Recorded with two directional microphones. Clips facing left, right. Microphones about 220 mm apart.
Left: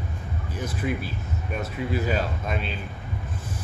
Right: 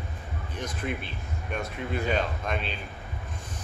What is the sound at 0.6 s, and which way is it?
Speech, 5° left (ahead or behind).